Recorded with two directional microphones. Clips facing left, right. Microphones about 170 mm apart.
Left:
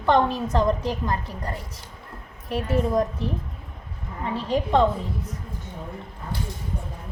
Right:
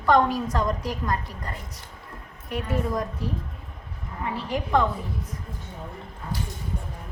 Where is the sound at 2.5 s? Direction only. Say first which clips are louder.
Left 4 dB; 25° left (ahead or behind).